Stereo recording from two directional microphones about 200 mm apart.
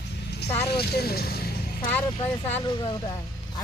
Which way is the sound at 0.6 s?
55° left (ahead or behind).